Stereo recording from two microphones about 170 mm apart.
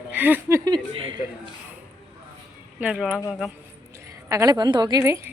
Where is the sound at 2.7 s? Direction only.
5° right (ahead or behind).